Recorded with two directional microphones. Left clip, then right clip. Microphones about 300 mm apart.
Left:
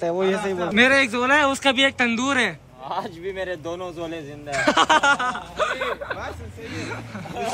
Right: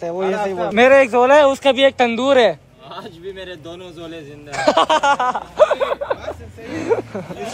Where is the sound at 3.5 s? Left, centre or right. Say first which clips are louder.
Left 4 dB; left.